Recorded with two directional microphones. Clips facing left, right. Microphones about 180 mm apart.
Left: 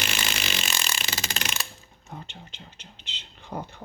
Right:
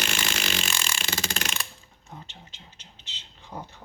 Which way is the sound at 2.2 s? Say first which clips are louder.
Left 4 dB; 60° left (ahead or behind).